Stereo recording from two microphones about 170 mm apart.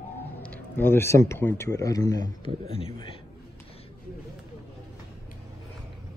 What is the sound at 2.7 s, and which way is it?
Speech, 35° left (ahead or behind).